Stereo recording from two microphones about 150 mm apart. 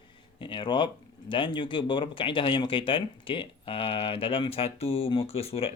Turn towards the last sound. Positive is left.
turn(degrees=40)  # may be behind; listen again after turning